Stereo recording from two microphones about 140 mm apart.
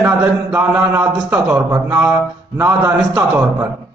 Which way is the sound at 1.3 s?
10° right (ahead or behind).